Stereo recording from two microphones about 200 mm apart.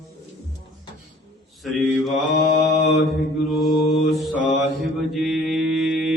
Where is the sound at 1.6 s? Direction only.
Centre (ahead or behind).